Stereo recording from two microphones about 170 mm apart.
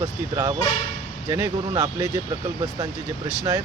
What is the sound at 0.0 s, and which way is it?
A man's voice, 20° right (ahead or behind).